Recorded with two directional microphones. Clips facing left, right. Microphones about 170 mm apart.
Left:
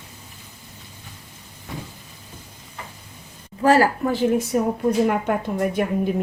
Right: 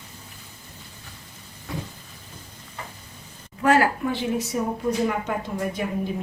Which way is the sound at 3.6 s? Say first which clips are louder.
Left 3 dB; 35° left (ahead or behind).